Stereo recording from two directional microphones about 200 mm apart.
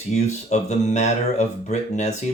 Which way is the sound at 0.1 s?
35° left (ahead or behind).